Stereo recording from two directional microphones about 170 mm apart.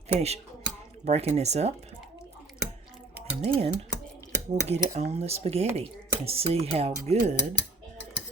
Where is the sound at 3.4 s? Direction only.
40° right (ahead or behind).